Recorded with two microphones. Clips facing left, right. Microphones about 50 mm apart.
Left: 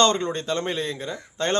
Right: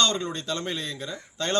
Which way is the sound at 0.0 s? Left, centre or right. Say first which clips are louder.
Left 5 dB; left.